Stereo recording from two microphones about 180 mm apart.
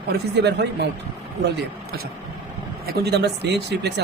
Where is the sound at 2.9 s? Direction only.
65° right (ahead or behind).